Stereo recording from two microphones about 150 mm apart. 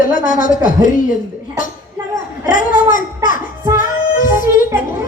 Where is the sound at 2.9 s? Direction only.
60° left (ahead or behind).